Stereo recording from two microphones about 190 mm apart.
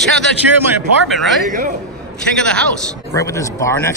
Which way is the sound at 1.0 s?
Centre (ahead or behind).